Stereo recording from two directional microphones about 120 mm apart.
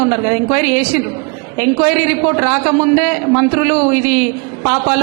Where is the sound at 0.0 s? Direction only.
20° right (ahead or behind).